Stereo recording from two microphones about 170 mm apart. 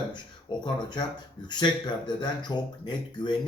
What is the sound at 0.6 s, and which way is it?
Speech, 25° left (ahead or behind).